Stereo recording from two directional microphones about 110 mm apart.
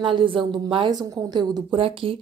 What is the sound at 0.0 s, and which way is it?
Speech, 50° right (ahead or behind).